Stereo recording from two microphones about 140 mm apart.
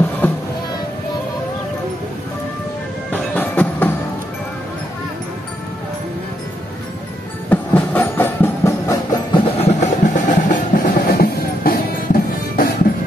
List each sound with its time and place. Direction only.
0.2 s music: 15° left (ahead or behind)
3.1 s music: 10° left (ahead or behind)
7.4 s music: 10° left (ahead or behind)
9.3 s music: 50° left (ahead or behind); by 12.6 s 90° left